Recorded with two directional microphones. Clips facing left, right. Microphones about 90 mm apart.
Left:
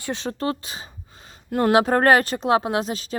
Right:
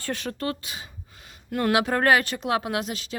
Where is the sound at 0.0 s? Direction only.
25° left (ahead or behind).